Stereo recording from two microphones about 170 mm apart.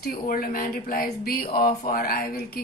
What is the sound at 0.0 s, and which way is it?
A woman's voice, 60° left (ahead or behind).